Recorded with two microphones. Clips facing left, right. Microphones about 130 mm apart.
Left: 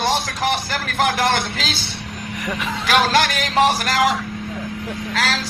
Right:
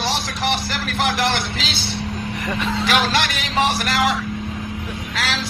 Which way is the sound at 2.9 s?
45° left (ahead or behind).